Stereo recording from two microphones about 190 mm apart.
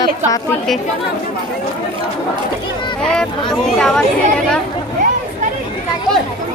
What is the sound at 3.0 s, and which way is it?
Speech, 5° left (ahead or behind).